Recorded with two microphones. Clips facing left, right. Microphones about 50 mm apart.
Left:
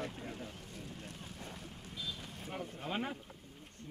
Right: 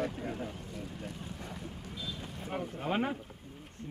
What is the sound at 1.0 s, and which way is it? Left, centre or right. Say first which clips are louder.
Vehicle: right 5 dB; right.